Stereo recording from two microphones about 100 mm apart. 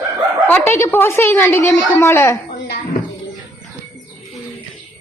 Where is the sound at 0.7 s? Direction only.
25° left (ahead or behind).